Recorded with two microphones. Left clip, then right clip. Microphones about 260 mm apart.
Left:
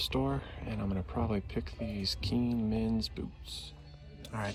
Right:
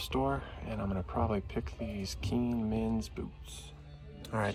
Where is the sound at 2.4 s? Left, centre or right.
Right.